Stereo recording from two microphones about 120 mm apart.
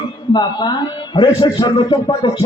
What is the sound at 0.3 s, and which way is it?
A man's voice, 40° left (ahead or behind).